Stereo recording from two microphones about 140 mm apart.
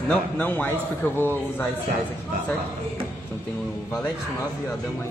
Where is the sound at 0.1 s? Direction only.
10° left (ahead or behind).